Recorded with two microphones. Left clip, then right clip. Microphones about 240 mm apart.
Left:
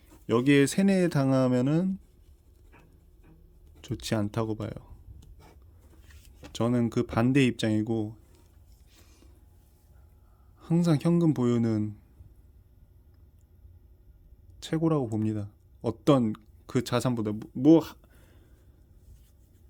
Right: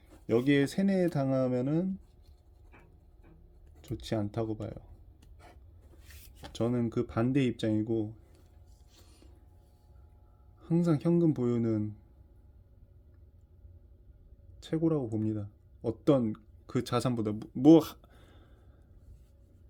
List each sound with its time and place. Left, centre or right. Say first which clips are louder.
0.3 s speech: left 4 dB; left
3.8 s speech: left 4 dB; left
6.5 s speech: left 4 dB; left
9.0 s a sound: left 1 dB; centre
10.6 s speech: left 2 dB; left
14.6 s speech: left 3 dB; left; by 18.4 s centre